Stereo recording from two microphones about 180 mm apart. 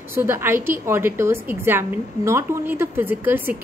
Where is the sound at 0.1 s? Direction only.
15° right (ahead or behind).